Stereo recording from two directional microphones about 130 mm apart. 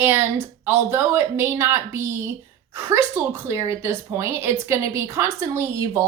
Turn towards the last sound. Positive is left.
turn(degrees=-20)  # may be behind; listen again after turning